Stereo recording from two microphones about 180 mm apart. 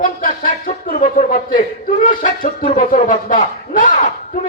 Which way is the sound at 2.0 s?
50° left (ahead or behind).